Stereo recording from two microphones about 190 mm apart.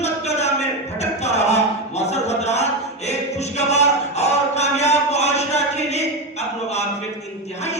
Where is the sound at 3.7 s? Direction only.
35° left (ahead or behind).